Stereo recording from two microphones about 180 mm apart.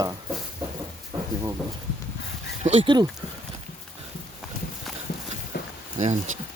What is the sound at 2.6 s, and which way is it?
Speech, 35° right (ahead or behind).